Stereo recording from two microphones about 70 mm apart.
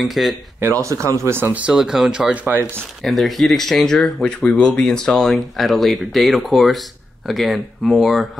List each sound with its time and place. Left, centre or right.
0.0 s speech: centre
0.8 s speech: right
1.7 s speech: centre
2.3 s speech: right
3.0 s speech: centre
4.3 s speech: centre